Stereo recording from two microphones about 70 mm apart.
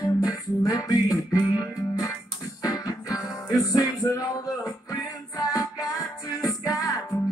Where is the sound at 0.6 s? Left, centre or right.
Left.